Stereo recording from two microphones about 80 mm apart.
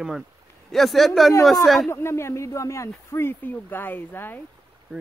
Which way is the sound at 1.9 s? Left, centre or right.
Left.